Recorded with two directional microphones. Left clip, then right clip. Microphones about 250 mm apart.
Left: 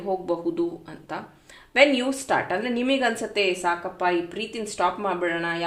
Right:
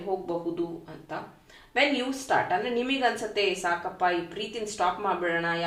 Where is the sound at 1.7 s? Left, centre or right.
Left.